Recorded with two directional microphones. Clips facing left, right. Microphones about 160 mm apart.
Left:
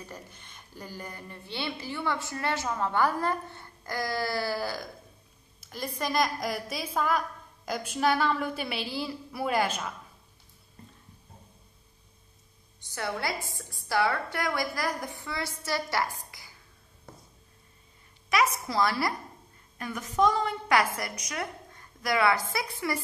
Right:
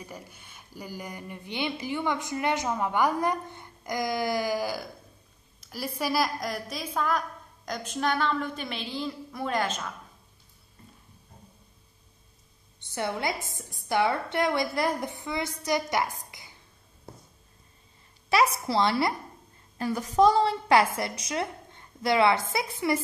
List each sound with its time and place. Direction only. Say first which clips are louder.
0.0 s a woman's voice: right 1 dB; 10° right (ahead or behind); by 9.9 s 10° left (ahead or behind)
12.9 s a woman's voice: right 2 dB; 20° right (ahead or behind)
18.3 s a woman's voice: right 3 dB; 30° right (ahead or behind)